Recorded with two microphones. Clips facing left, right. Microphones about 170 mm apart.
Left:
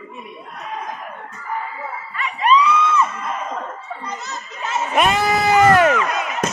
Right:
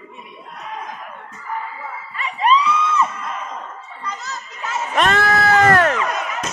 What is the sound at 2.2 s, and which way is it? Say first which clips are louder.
Music: left 1 dB; 30° right (ahead or behind).